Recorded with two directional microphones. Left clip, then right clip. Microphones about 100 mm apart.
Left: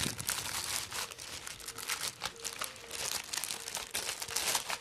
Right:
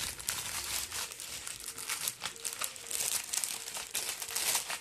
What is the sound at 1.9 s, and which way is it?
Crumpling, 30° left (ahead or behind).